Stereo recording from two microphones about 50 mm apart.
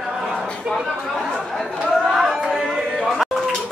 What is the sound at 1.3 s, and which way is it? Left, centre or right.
Chatter, centre.